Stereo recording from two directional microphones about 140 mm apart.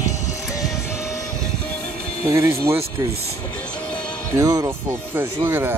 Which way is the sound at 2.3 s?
20° right (ahead or behind).